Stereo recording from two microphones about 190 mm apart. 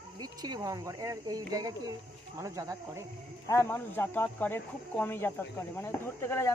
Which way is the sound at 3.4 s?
15° left (ahead or behind).